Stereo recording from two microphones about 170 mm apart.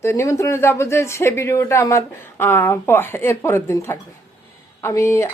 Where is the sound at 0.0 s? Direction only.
15° left (ahead or behind).